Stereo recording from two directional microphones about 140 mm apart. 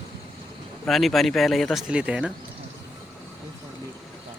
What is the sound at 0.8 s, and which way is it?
A man's voice, centre (ahead or behind).